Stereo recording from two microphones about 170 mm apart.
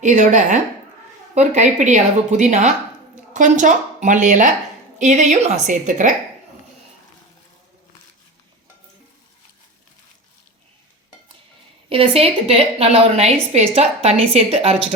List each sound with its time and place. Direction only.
0.0 s speech: 45° right (ahead or behind)
11.9 s a woman's voice: 35° right (ahead or behind)